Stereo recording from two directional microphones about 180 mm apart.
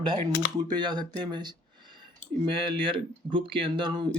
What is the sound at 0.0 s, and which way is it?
Speech, 25° right (ahead or behind).